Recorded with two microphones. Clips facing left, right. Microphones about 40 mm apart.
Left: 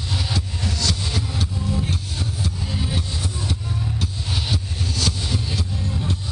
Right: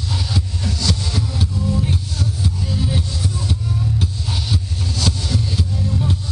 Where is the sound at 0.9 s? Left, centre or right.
Centre.